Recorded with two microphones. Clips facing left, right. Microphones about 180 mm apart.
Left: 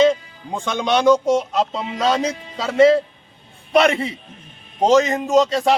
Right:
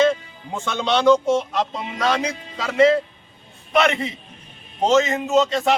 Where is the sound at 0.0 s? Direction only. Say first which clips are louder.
Left 3 dB; 15° left (ahead or behind).